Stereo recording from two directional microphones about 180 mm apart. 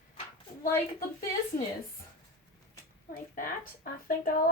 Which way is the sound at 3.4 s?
50° left (ahead or behind).